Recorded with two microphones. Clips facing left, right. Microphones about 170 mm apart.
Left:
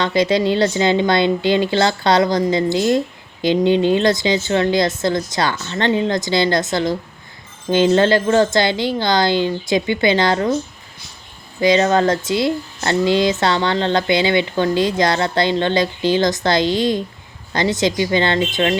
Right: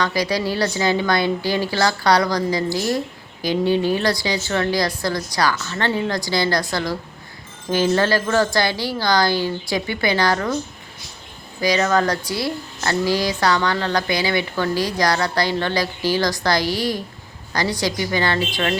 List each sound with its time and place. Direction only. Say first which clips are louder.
0.0 s speech: left 5 dB; 25° left (ahead or behind)
11.6 s speech: left 4 dB; 25° left (ahead or behind)